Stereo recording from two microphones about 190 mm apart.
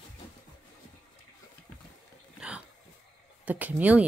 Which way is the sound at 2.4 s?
5° right (ahead or behind).